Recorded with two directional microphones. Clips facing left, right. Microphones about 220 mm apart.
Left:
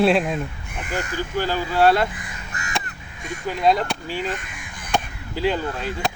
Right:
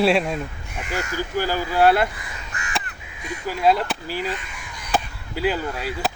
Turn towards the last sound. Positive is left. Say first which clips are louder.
# even
turn(degrees=-5)  # may be behind; listen again after turning